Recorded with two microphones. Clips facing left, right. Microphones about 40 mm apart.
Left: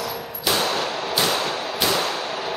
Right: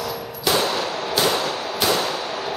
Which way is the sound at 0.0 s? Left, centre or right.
Centre.